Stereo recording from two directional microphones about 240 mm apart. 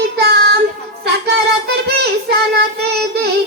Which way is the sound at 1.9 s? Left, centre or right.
Right.